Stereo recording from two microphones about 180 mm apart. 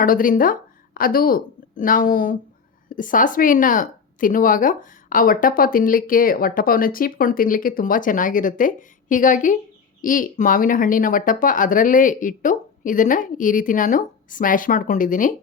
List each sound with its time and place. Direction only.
0.0 s a woman's voice: 50° left (ahead or behind)